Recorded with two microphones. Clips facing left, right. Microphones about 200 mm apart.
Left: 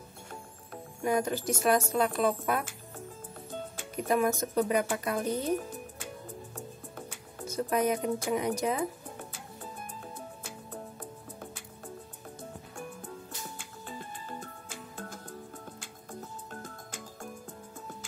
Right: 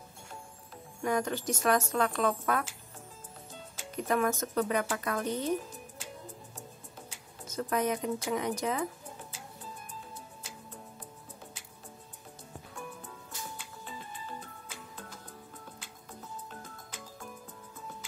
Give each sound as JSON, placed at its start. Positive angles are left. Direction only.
{"t": 1.0, "sound": "speech", "side_deg": 10}
{"t": 3.9, "sound": "speech", "side_deg": 10}
{"t": 6.5, "sound": "music", "side_deg": 60}
{"t": 7.4, "sound": "speech", "side_deg": 10}
{"t": 10.1, "sound": "music", "side_deg": 55}
{"t": 13.6, "sound": "music", "side_deg": 50}